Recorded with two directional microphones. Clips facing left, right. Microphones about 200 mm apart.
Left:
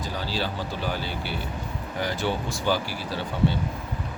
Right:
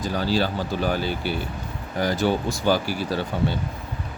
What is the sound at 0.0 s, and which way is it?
Speech, 45° right (ahead or behind).